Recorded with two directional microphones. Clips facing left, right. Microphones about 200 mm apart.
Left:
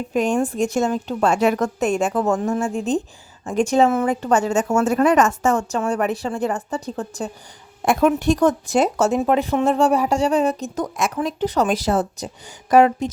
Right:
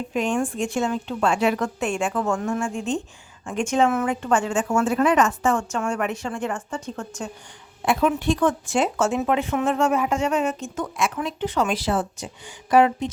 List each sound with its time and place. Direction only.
0.1 s speech: 40° left (ahead or behind)